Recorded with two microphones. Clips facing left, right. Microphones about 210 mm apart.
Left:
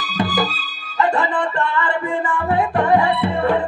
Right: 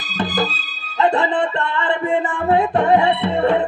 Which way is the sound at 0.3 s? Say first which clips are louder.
Even; 25° right (ahead or behind).